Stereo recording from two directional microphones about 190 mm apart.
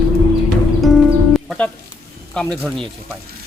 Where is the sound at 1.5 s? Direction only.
10° left (ahead or behind).